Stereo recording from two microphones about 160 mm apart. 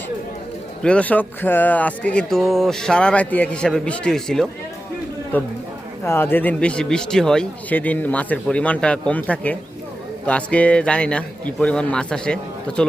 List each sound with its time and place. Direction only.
0.8 s speech: 5° left (ahead or behind)
6.1 s speech: 15° left (ahead or behind)